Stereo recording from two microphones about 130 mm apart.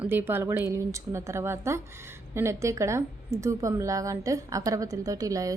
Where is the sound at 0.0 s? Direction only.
15° right (ahead or behind).